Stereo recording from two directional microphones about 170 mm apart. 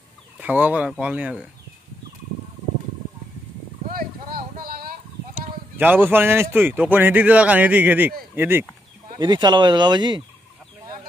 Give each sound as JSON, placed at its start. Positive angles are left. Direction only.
{"t": 0.4, "sound": "a man's voice", "side_deg": -10}
{"t": 3.9, "sound": "a sound", "side_deg": -60}
{"t": 5.8, "sound": "a man's voice", "side_deg": -10}
{"t": 9.2, "sound": "speech", "side_deg": -25}